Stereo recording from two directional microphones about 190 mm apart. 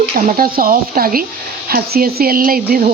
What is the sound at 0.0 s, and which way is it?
Speech, 45° right (ahead or behind).